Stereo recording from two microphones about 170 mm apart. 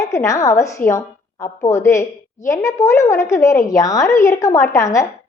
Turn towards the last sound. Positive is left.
turn(degrees=20)  # may be behind; listen again after turning